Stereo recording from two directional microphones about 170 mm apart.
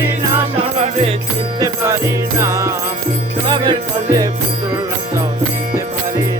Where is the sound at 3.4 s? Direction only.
30° right (ahead or behind).